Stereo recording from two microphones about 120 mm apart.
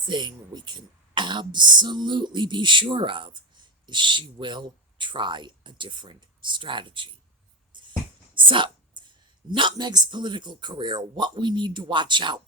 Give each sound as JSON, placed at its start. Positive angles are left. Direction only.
{"t": 0.1, "sound": "speech", "side_deg": -40}
{"t": 7.7, "sound": "music", "side_deg": -40}
{"t": 8.4, "sound": "a sound", "side_deg": -45}
{"t": 9.5, "sound": "speech", "side_deg": -40}